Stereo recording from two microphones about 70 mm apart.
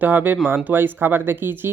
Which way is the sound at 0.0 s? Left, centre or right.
Right.